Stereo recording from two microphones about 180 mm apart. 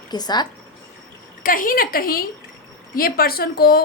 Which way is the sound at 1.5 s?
50° left (ahead or behind).